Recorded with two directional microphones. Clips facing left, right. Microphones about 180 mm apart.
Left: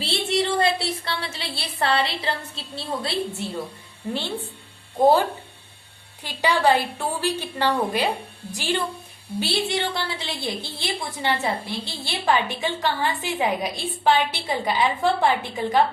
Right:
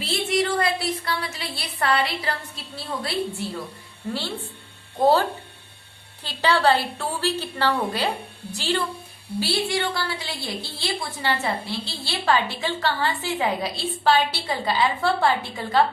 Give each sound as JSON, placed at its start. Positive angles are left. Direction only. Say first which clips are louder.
{"t": 0.0, "sound": "a sound", "louder": "even", "side_deg": 30}
{"t": 2.7, "sound": "a woman's voice", "louder": "left 1 dB", "side_deg": 25}
{"t": 5.0, "sound": "a woman's voice", "louder": "left 2 dB", "side_deg": 15}
{"t": 6.2, "sound": "a woman's voice", "louder": "even", "side_deg": 15}